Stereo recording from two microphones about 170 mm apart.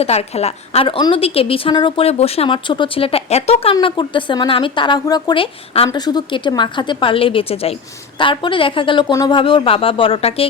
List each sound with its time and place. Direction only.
0.0 s a woman's voice: 40° left (ahead or behind)